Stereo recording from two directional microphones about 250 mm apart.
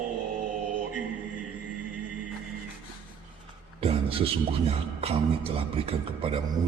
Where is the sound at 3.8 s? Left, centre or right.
Right.